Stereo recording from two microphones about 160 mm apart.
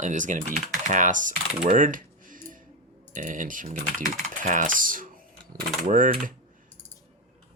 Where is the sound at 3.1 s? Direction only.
55° right (ahead or behind).